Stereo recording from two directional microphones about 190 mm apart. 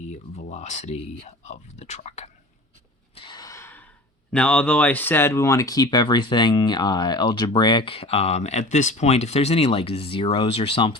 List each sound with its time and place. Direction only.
0.1 s speech: 35° left (ahead or behind)
3.2 s gasp: 25° left (ahead or behind)
4.3 s speech: 5° left (ahead or behind); by 10.9 s 30° left (ahead or behind)